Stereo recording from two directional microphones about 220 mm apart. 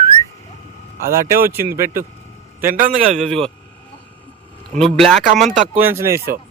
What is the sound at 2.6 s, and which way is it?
Speech, 35° right (ahead or behind).